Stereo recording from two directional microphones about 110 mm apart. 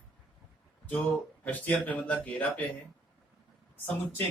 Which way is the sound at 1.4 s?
15° left (ahead or behind).